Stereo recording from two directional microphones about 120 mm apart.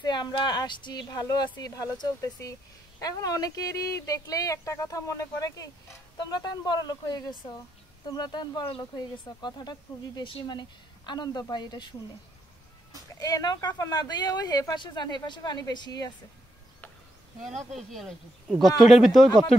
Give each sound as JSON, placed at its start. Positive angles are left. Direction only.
{"t": 0.0, "sound": "speech", "side_deg": 35}
{"t": 13.2, "sound": "speech", "side_deg": 30}
{"t": 17.6, "sound": "speech", "side_deg": 0}